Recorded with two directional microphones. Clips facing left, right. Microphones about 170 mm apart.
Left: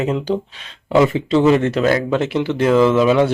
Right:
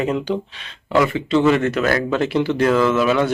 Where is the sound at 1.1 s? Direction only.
35° left (ahead or behind).